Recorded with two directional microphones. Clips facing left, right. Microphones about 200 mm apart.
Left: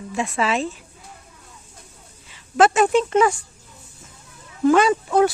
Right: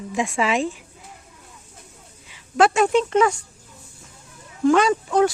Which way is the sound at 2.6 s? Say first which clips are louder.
Left 1 dB; centre (ahead or behind).